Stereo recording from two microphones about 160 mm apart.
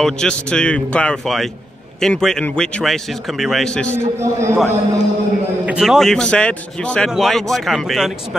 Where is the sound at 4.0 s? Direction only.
15° right (ahead or behind).